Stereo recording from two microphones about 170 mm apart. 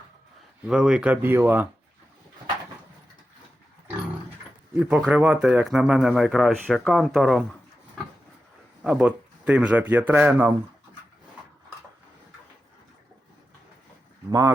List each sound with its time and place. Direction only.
0.7 s speech: 5° right (ahead or behind)
4.7 s speech: 5° right (ahead or behind)
8.8 s speech: 5° right (ahead or behind)
14.3 s speech: 20° right (ahead or behind)